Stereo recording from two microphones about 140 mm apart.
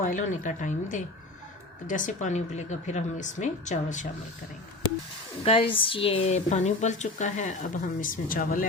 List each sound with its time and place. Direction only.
0.0 s speech: 70° left (ahead or behind)
5.4 s speech: 45° left (ahead or behind); by 8.6 s 85° left